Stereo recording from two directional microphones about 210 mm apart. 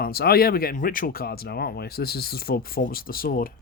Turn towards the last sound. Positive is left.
turn(degrees=45)  # may be behind; listen again after turning